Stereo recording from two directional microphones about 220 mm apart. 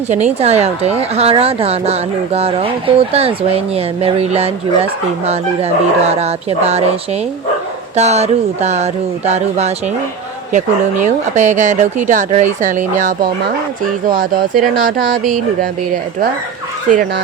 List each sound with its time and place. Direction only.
0.3 s speech: 30° right (ahead or behind)
7.9 s speech: 30° right (ahead or behind)